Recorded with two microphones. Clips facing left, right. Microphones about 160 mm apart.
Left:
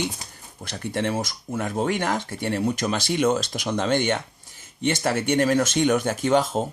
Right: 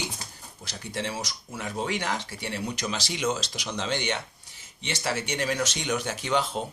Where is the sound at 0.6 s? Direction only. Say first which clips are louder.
Left 7 dB; 55° left (ahead or behind).